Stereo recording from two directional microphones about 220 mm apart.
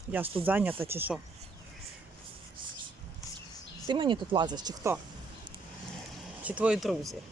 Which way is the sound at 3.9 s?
20° right (ahead or behind).